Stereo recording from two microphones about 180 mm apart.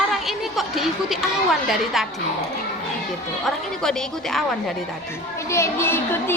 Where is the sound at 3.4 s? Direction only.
5° left (ahead or behind).